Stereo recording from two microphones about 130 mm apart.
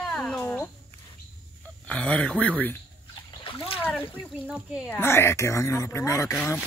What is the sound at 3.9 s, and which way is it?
Speech, 10° left (ahead or behind).